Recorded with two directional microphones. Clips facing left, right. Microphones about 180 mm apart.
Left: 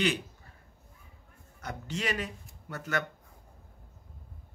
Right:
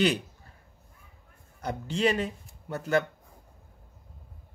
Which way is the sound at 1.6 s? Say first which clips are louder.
Right 8 dB; 30° right (ahead or behind).